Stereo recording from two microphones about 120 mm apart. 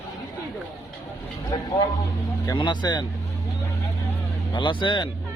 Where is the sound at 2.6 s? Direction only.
40° left (ahead or behind).